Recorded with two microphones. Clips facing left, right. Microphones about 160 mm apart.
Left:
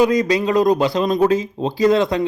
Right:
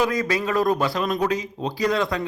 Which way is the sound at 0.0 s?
20° left (ahead or behind).